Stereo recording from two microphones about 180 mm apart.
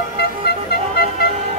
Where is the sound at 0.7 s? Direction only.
60° left (ahead or behind).